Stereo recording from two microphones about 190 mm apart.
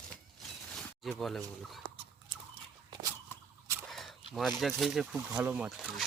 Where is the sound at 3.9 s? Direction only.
Centre (ahead or behind).